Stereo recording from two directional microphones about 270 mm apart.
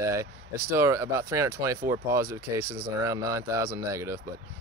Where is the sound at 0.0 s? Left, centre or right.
Centre.